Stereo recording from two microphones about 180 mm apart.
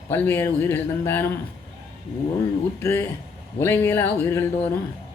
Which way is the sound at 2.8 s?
15° left (ahead or behind).